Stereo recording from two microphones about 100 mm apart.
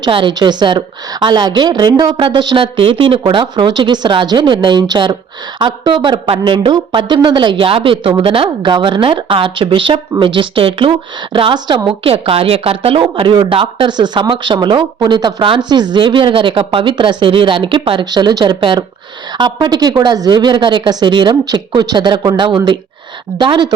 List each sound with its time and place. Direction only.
0.1 s speech: 55° right (ahead or behind)
2.1 s speech: 55° right (ahead or behind)
2.7 s speech: 60° right (ahead or behind)
11.5 s speech: 45° right (ahead or behind)
11.9 s speech: 70° right (ahead or behind); by 23.6 s 50° right (ahead or behind)